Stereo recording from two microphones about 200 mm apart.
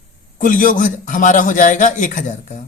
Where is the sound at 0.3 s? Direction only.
40° left (ahead or behind).